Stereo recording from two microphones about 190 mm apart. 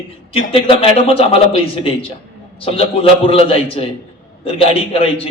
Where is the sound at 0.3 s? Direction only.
30° left (ahead or behind).